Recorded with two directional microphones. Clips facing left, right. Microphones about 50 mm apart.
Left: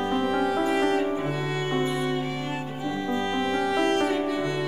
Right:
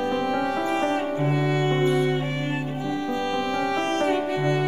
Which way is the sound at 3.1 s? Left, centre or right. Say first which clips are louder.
Left 1 dB; left.